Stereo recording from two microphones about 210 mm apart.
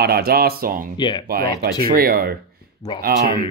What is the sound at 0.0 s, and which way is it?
Speech, 50° right (ahead or behind).